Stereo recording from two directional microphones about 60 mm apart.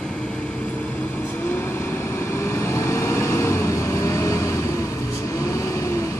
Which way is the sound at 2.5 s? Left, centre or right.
Left.